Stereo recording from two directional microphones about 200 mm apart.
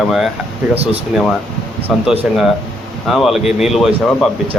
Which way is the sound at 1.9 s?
Centre (ahead or behind).